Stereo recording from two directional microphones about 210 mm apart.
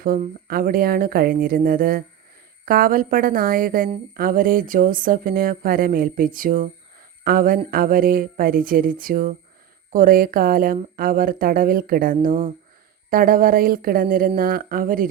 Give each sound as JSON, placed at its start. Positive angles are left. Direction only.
{"t": 0.0, "sound": "a woman's voice", "side_deg": -45}